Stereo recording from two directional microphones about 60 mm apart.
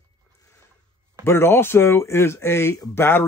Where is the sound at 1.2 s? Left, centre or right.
Left.